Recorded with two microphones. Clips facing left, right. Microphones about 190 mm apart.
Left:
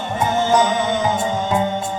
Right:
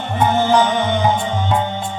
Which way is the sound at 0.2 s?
60° right (ahead or behind).